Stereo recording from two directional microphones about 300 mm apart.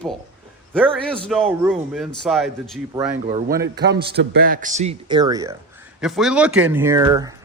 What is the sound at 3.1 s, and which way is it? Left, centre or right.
Speech, right.